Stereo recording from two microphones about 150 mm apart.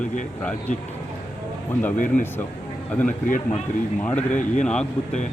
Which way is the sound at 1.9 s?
60° left (ahead or behind).